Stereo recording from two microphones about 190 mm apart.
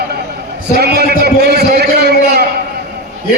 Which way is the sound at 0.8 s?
55° right (ahead or behind).